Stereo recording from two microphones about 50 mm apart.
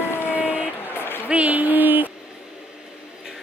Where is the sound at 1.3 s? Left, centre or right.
Right.